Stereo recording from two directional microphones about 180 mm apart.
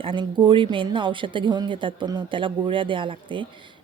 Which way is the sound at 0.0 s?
30° right (ahead or behind).